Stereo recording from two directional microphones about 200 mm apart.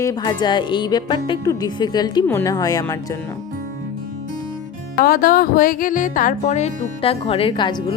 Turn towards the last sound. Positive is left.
turn(degrees=25)  # may be behind; listen again after turning